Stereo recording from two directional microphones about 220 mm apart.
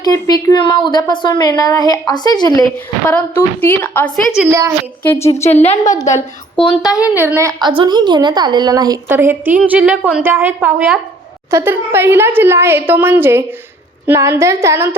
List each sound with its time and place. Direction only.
0.0 s a woman's voice: 15° left (ahead or behind)
2.7 s a woman's voice: 10° left (ahead or behind)
5.5 s a woman's voice: 35° left (ahead or behind)
7.1 s a woman's voice: 10° right (ahead or behind)